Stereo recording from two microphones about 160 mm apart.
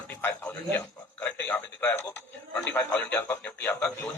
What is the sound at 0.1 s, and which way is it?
A man's voice, 15° left (ahead or behind).